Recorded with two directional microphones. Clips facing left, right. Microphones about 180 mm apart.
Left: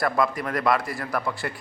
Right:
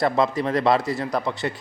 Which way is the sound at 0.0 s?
25° right (ahead or behind).